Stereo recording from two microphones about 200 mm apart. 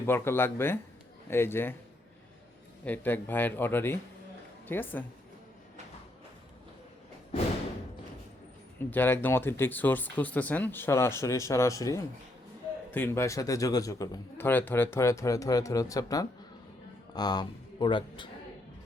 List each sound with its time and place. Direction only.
0.0 s a man's voice: 10° left (ahead or behind)
2.8 s a man's voice: 10° left (ahead or behind)
8.9 s a man's voice: 10° left (ahead or behind)